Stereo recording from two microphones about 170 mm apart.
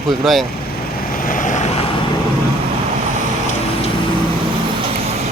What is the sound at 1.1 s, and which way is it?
Vehicle, 55° left (ahead or behind).